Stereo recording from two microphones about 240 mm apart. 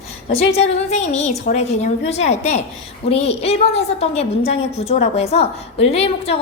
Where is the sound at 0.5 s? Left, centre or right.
Left.